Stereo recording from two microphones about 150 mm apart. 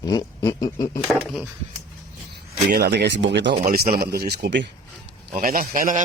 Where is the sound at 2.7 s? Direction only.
90° right.